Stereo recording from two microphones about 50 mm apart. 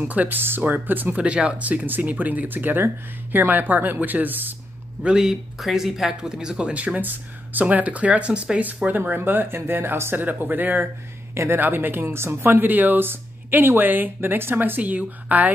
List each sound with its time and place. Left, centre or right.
0.1 s speech: right
1.1 s speech: right
5.0 s speech: centre
6.7 s speech: right
8.8 s speech: right
10.1 s speech: right
14.8 s speech: right